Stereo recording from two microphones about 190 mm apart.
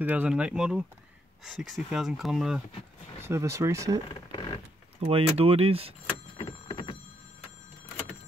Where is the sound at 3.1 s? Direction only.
15° right (ahead or behind).